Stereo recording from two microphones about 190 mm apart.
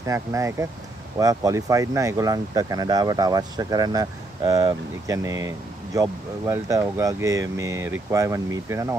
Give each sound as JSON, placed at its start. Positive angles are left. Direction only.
{"t": 0.0, "sound": "speech", "side_deg": -15}